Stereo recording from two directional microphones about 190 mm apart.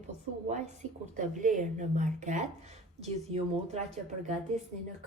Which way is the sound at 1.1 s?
40° right (ahead or behind).